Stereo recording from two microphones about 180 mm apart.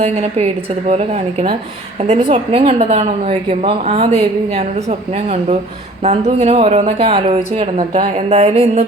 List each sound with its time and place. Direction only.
0.0 s a woman's voice: 35° right (ahead or behind)